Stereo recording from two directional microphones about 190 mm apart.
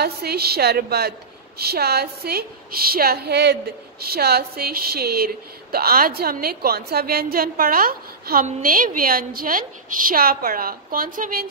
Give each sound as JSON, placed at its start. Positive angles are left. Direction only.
{"t": 0.0, "sound": "a woman's voice", "side_deg": -55}